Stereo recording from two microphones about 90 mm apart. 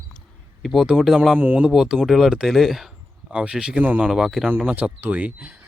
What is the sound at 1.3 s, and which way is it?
Speech, 15° right (ahead or behind).